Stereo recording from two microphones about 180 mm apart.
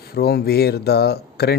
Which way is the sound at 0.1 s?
60° left (ahead or behind).